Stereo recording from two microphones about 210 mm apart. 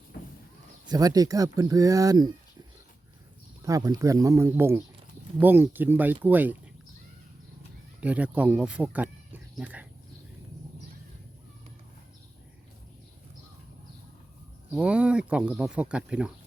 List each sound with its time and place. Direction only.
0.9 s speech: 15° right (ahead or behind)
3.6 s speech: 15° right (ahead or behind)
8.0 s speech: 5° right (ahead or behind)
14.7 s speech: 5° right (ahead or behind)